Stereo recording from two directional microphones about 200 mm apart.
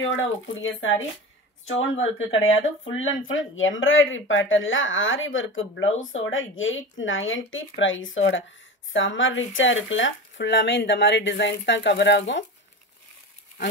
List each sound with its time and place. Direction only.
0.0 s speech: 70° left (ahead or behind)